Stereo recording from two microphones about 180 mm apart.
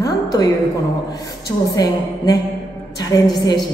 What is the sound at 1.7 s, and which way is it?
Speech, 20° left (ahead or behind).